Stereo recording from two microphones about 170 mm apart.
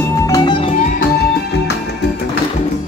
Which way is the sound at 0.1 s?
25° left (ahead or behind).